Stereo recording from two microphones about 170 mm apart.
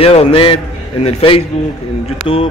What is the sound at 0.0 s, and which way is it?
A man's voice, 35° left (ahead or behind).